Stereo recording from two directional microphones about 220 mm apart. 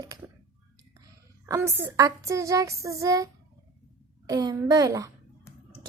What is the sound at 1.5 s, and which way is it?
A child's voice, 10° right (ahead or behind).